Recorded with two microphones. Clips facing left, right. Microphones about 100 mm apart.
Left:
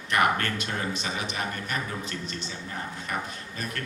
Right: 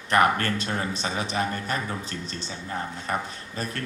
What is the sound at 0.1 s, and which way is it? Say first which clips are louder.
A man's voice: right 3 dB; 35° right (ahead or behind).